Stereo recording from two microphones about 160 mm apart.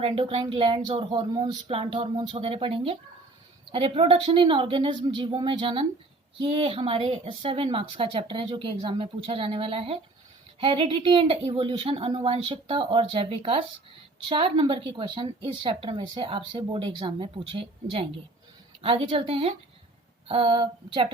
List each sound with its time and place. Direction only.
0.0 s a woman's voice: 35° right (ahead or behind)